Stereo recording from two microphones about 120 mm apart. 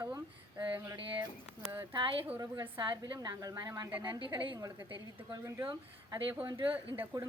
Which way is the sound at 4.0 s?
40° right (ahead or behind).